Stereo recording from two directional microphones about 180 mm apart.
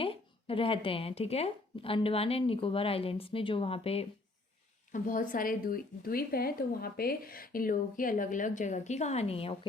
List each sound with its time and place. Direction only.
0.0 s speech: 30° left (ahead or behind)
4.9 s a woman's voice: 45° left (ahead or behind)